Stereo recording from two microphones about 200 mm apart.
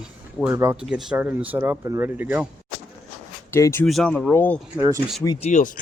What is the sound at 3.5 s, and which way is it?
Speech, 15° left (ahead or behind).